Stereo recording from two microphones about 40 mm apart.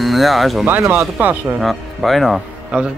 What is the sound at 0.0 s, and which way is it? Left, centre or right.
Speech, centre.